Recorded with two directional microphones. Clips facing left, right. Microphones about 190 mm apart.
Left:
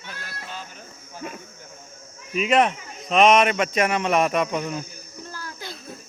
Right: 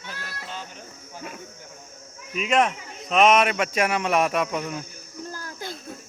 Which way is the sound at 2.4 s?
5° left (ahead or behind).